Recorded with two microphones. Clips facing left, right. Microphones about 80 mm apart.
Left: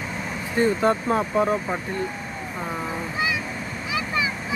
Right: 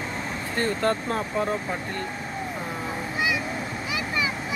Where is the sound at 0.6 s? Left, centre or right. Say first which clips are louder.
Left 5 dB; centre.